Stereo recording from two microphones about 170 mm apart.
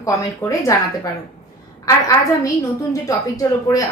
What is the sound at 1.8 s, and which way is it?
A woman's voice, 20° left (ahead or behind).